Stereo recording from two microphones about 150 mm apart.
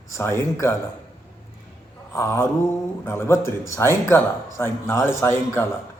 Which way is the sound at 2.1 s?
20° left (ahead or behind).